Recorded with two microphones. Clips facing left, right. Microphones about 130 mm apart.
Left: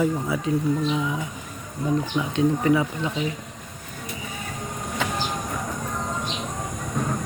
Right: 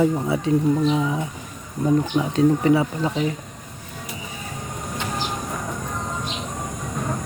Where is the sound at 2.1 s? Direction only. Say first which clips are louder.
Right 4 dB; 35° right (ahead or behind).